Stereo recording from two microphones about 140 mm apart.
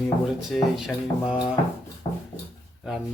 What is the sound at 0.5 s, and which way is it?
Speech, centre (ahead or behind).